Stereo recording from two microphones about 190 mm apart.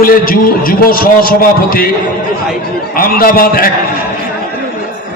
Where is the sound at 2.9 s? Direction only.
50° left (ahead or behind).